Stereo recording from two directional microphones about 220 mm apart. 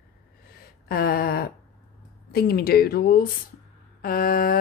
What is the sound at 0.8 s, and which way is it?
A woman's voice, 45° left (ahead or behind).